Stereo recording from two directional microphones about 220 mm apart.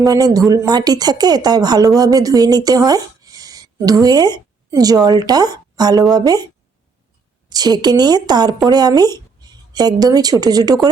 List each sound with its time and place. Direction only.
0.0 s a woman's voice: 15° right (ahead or behind)
7.5 s a woman's voice: 20° right (ahead or behind)